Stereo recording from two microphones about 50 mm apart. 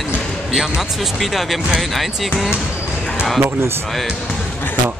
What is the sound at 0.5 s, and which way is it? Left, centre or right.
Speech, centre.